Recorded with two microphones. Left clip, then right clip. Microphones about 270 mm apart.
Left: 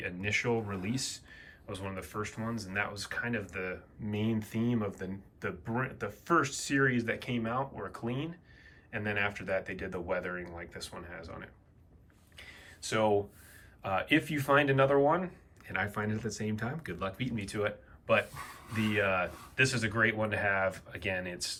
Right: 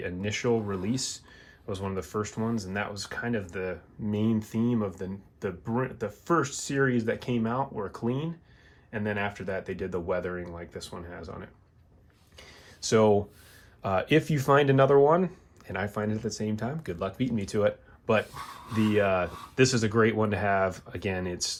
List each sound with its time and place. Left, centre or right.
0.0 s speech: centre
12.4 s a sound: centre
13.8 s speech: centre
18.7 s speech: centre